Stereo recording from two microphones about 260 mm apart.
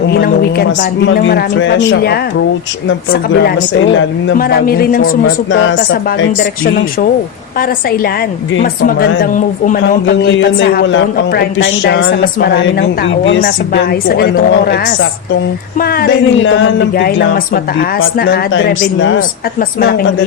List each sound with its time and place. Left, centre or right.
0.1 s speech: left
4.4 s speech: left
5.2 s a woman's voice: left
8.6 s speech: left
10.1 s a woman's voice: left
15.8 s a woman's voice: left
19.5 s speech: left